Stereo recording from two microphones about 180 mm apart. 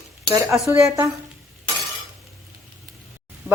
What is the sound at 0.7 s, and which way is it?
Speech, 15° right (ahead or behind).